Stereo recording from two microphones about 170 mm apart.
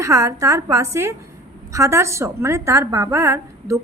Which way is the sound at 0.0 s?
20° right (ahead or behind).